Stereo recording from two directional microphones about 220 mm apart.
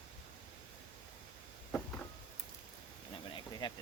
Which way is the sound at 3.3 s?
20° left (ahead or behind).